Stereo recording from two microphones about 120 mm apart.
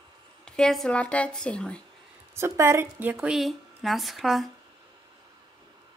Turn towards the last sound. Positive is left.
turn(degrees=0)  # may be behind; listen again after turning